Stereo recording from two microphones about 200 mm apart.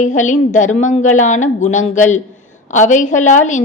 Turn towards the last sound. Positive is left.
turn(degrees=40)  # may be behind; listen again after turning